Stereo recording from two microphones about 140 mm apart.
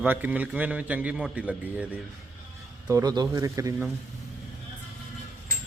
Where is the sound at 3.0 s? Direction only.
30° right (ahead or behind).